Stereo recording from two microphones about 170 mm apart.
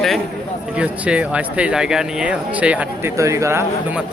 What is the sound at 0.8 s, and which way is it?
Speech, 5° right (ahead or behind).